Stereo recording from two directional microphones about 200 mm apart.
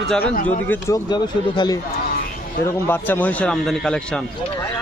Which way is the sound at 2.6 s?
10° left (ahead or behind).